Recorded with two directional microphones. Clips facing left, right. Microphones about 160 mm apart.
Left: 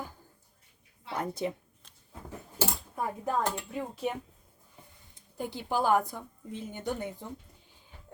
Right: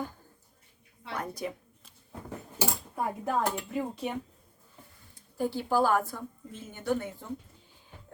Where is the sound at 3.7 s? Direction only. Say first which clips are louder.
Right 1 dB; centre (ahead or behind).